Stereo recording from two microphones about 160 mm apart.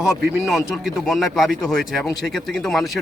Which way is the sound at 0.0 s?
5° right (ahead or behind).